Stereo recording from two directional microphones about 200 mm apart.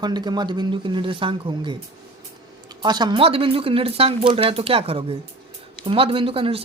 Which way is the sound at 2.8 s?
20° right (ahead or behind).